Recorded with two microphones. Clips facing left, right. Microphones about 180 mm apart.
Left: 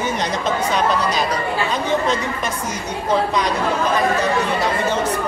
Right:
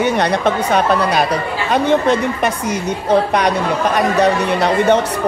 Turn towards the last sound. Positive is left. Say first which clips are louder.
# right 6 dB
turn(degrees=-70)  # may be behind; listen again after turning